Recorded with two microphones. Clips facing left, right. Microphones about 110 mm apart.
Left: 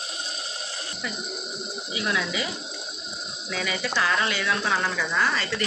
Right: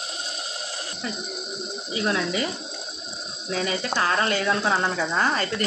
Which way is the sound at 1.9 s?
40° right (ahead or behind).